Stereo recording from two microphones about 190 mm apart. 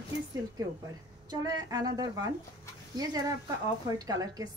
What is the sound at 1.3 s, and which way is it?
A woman's voice, 20° right (ahead or behind).